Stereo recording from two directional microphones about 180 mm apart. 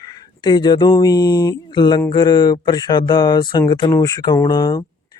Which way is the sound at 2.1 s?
25° left (ahead or behind).